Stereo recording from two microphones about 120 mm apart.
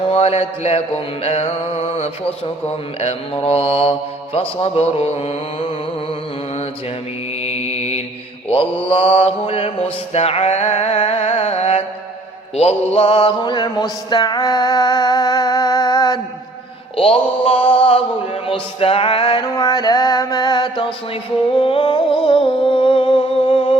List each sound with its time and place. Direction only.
0.1 s mantra: 60° left (ahead or behind)
7.4 s mantra: 60° left (ahead or behind)
11.0 s music: 50° left (ahead or behind)
12.5 s mantra: 60° left (ahead or behind); by 16.1 s 30° left (ahead or behind)
17.0 s mantra: 50° left (ahead or behind)
18.8 s music: 50° left (ahead or behind)